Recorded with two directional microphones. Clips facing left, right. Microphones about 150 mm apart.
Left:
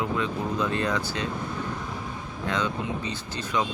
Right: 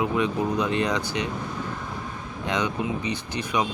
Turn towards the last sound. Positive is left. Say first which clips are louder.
# right 2 dB
turn(degrees=-15)  # may be behind; listen again after turning